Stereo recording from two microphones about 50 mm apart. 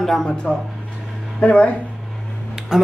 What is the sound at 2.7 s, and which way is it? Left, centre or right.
Music, centre.